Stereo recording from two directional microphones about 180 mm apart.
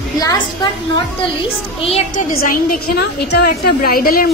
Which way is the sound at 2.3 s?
55° left (ahead or behind).